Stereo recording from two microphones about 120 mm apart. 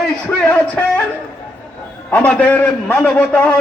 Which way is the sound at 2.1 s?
10° left (ahead or behind).